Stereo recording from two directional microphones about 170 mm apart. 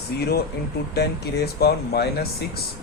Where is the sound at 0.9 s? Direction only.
70° left (ahead or behind).